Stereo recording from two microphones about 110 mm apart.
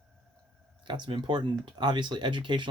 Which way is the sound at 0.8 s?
45° right (ahead or behind).